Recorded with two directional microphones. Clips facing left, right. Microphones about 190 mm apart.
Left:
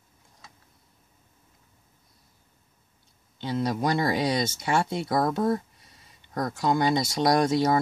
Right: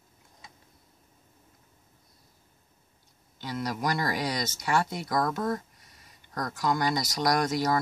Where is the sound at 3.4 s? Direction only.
25° left (ahead or behind).